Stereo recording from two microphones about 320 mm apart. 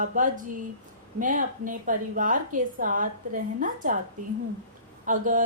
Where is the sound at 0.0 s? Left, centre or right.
Right.